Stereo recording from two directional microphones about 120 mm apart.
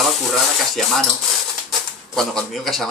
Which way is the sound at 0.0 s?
Centre (ahead or behind).